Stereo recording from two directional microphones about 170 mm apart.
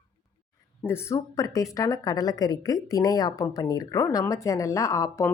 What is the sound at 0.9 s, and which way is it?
A woman's voice, 15° left (ahead or behind).